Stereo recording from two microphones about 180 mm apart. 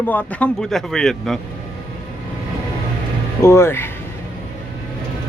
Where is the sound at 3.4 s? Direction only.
15° left (ahead or behind).